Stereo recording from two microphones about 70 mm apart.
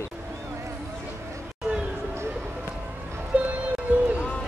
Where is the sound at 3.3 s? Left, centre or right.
Right.